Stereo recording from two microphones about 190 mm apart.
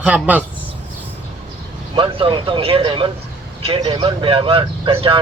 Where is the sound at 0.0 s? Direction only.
5° right (ahead or behind).